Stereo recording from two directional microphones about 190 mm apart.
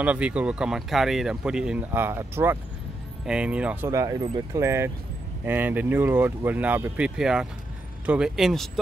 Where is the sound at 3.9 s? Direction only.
20° right (ahead or behind).